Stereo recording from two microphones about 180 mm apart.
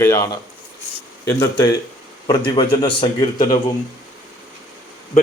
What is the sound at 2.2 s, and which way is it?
A man's voice, 25° left (ahead or behind).